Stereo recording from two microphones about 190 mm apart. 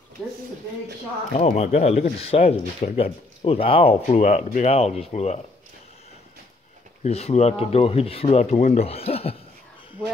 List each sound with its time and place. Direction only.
1.3 s speech: 35° left (ahead or behind)
7.0 s speech: 35° left (ahead or behind)